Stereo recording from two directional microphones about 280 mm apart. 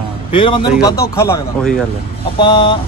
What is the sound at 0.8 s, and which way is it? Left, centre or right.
Speech, centre.